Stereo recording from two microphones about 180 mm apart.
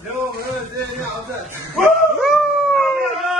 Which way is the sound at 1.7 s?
Centre (ahead or behind).